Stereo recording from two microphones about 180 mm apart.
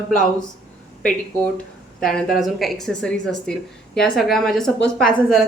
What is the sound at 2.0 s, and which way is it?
A woman's voice, centre (ahead or behind).